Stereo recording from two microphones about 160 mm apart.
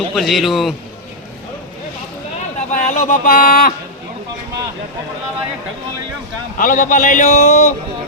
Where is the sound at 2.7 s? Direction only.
50° left (ahead or behind).